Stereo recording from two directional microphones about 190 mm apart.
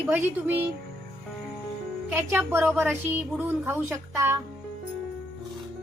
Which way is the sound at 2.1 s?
10° right (ahead or behind).